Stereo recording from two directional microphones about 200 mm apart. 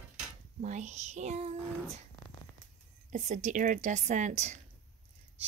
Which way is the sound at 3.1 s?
35° right (ahead or behind).